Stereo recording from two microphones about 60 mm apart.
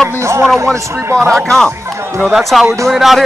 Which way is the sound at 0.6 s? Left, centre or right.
Right.